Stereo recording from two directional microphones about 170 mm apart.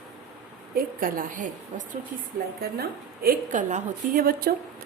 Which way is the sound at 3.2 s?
45° right (ahead or behind).